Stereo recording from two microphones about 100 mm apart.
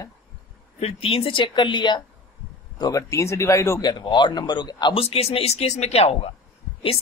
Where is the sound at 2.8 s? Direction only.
30° left (ahead or behind).